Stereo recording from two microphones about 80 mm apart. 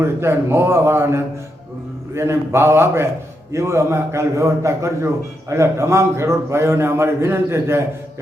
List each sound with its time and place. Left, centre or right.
0.0 s a man's voice: right